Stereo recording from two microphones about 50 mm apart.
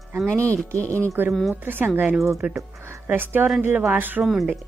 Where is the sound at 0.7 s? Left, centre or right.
Left.